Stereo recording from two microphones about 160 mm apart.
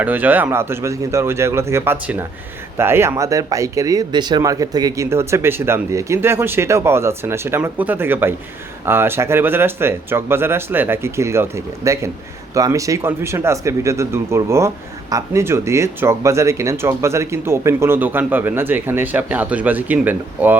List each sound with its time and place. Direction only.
0.0 s speech: 10° right (ahead or behind)